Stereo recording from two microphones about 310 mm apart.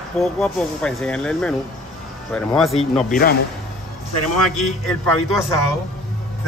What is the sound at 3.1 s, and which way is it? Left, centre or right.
Speech, left.